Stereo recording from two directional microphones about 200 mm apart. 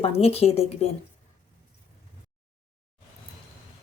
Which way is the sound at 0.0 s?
30° left (ahead or behind).